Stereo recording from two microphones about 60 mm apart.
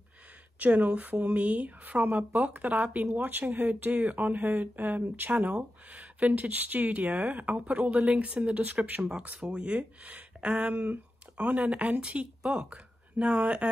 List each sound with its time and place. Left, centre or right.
0.6 s speech: right